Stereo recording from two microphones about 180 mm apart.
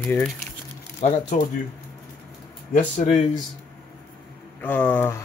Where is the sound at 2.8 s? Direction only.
40° left (ahead or behind).